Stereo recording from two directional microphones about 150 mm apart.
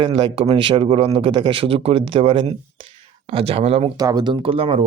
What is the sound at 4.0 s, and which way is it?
Speech, 25° right (ahead or behind).